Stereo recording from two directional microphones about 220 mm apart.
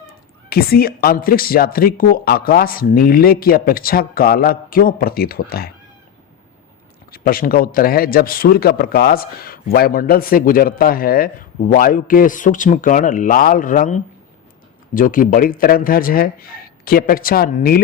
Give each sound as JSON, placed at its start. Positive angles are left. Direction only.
{"t": 0.5, "sound": "a man's voice", "side_deg": 45}
{"t": 7.1, "sound": "a man's voice", "side_deg": 40}